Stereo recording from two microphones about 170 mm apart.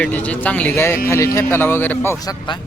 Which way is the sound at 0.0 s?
10° left (ahead or behind).